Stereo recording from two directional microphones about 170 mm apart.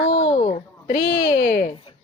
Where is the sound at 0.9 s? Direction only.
55° left (ahead or behind).